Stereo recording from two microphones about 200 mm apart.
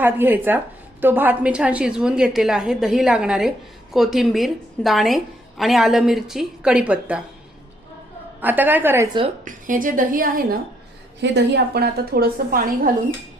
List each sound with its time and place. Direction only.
0.0 s a woman's voice: 10° right (ahead or behind)
8.4 s a woman's voice: 10° right (ahead or behind)
9.4 s a woman's voice: 40° right (ahead or behind)
11.2 s a woman's voice: 60° right (ahead or behind)